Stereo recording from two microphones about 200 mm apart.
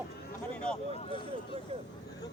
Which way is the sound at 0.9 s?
30° left (ahead or behind).